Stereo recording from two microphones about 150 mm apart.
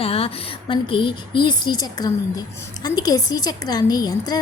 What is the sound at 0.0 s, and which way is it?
A woman's voice, 40° left (ahead or behind).